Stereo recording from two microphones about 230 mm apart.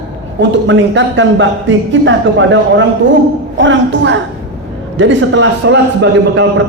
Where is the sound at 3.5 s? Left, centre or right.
Right.